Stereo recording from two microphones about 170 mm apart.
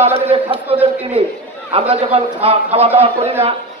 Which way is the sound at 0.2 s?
35° right (ahead or behind).